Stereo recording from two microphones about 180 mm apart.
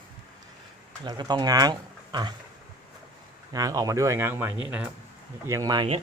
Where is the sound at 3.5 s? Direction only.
20° right (ahead or behind).